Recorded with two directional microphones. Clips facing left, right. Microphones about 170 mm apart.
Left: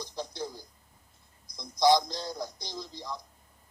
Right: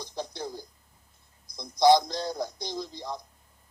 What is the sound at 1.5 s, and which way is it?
A man's voice, 55° right (ahead or behind).